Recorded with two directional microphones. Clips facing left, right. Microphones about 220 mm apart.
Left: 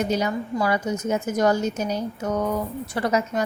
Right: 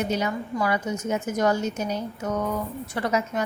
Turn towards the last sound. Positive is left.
turn(degrees=35)  # may be behind; listen again after turning